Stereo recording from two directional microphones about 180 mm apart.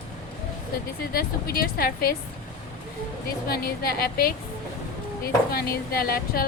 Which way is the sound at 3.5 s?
55° left (ahead or behind).